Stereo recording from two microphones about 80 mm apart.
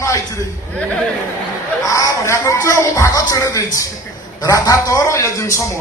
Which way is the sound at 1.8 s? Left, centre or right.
Left.